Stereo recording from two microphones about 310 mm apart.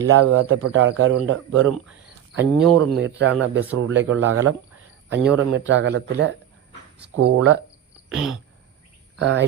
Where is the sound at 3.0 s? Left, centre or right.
Right.